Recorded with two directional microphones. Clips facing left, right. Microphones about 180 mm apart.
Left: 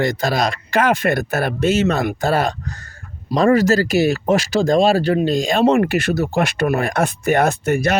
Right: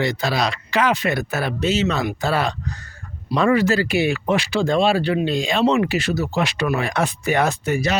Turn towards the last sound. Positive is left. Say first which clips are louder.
# left 3 dB
turn(degrees=50)  # may be behind; listen again after turning